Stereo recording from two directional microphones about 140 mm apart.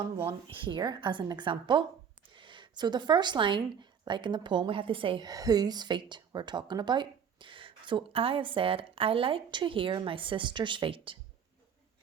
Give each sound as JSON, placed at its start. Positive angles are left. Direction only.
{"t": 0.3, "sound": "speech", "side_deg": -35}